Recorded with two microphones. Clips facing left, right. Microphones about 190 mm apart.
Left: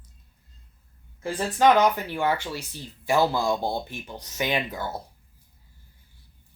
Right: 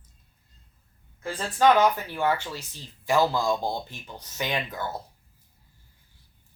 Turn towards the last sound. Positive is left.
turn(degrees=15)  # may be behind; listen again after turning